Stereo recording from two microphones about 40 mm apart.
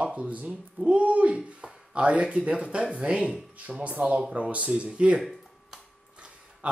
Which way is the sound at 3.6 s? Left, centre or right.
Right.